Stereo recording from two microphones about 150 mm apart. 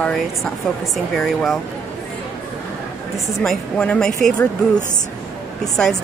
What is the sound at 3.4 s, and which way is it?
A woman's voice, 5° left (ahead or behind).